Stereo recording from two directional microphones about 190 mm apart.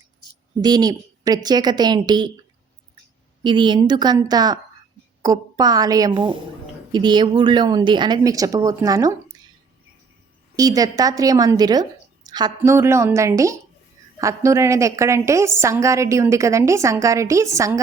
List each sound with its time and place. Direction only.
0.6 s a woman's voice: 20° right (ahead or behind)
3.4 s a woman's voice: 25° right (ahead or behind)
10.5 s a woman's voice: 20° right (ahead or behind)